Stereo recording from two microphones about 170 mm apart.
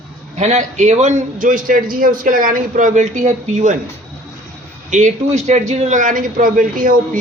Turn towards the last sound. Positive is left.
turn(degrees=-55)  # may be behind; listen again after turning